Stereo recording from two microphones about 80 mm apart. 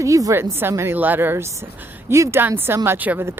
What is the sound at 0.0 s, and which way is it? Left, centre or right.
Speech, right.